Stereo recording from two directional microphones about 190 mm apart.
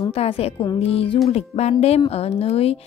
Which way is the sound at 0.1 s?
30° left (ahead or behind).